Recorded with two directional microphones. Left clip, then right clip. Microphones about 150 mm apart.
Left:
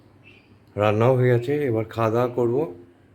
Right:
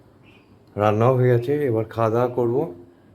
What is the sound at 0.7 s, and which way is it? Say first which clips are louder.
Speech: right 1 dB; 10° left (ahead or behind).